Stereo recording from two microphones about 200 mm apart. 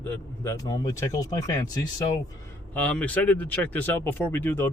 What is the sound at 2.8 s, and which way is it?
Speech, 5° left (ahead or behind).